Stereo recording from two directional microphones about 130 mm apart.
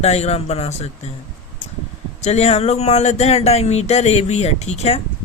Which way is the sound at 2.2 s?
55° left (ahead or behind).